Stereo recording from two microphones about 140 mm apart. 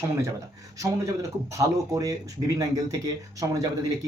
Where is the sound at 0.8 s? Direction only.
20° right (ahead or behind).